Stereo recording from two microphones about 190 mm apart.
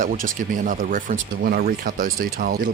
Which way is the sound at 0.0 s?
45° right (ahead or behind).